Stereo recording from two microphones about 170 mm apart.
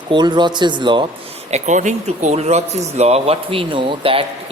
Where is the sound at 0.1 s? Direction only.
25° right (ahead or behind).